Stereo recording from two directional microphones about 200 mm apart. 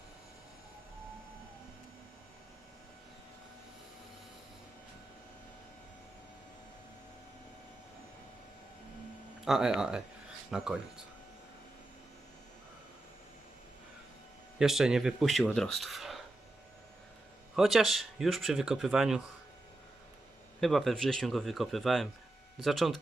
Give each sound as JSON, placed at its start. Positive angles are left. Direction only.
{"t": 9.4, "sound": "speech", "side_deg": 0}
{"t": 14.6, "sound": "speech", "side_deg": 0}
{"t": 17.6, "sound": "speech", "side_deg": 0}
{"t": 20.6, "sound": "speech", "side_deg": 0}